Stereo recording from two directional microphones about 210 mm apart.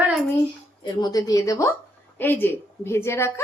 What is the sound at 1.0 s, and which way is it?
A woman's voice, 15° left (ahead or behind).